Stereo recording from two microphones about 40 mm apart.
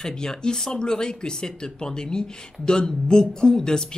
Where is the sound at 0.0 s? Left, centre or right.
Centre.